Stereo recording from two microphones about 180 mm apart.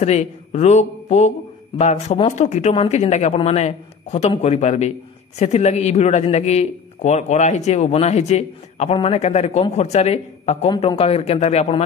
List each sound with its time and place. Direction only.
0.0 s a man's voice: 40° left (ahead or behind)